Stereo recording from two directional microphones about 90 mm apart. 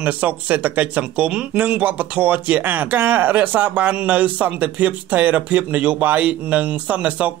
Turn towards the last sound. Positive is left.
turn(degrees=-15)  # may be behind; listen again after turning